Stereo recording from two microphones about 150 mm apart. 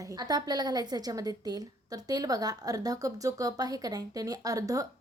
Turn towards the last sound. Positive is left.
turn(degrees=-20)  # may be behind; listen again after turning